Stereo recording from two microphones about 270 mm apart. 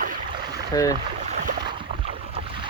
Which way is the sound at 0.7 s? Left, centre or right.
Centre.